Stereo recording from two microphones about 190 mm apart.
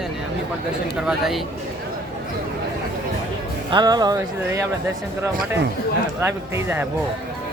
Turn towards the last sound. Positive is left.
turn(degrees=-10)  # may be behind; listen again after turning